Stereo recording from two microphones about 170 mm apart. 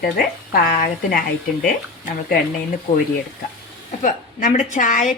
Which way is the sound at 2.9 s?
50° left (ahead or behind).